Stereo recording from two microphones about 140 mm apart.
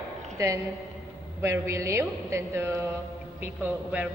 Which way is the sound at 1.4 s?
20° right (ahead or behind).